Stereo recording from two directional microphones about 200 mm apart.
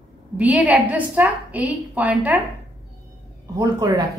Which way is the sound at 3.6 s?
20° right (ahead or behind).